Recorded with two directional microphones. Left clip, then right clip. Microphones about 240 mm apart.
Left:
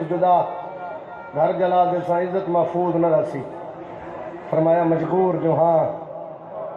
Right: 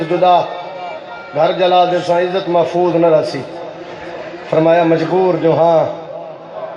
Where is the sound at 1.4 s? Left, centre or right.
Right.